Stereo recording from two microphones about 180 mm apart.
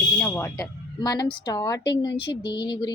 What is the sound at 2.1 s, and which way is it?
Speech, 70° left (ahead or behind).